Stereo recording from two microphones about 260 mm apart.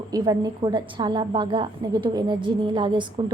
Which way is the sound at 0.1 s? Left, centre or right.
Centre.